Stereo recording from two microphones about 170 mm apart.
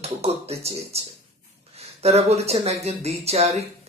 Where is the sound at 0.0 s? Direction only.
40° right (ahead or behind).